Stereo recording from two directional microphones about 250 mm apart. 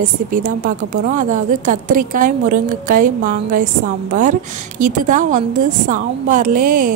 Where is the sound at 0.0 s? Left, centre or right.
Right.